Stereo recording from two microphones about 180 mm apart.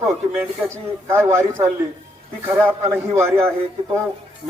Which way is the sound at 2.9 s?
15° right (ahead or behind).